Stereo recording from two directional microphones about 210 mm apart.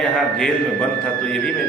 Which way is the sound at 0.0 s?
5° left (ahead or behind).